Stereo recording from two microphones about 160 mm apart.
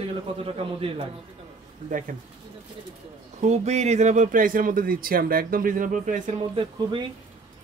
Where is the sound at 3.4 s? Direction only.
45° right (ahead or behind).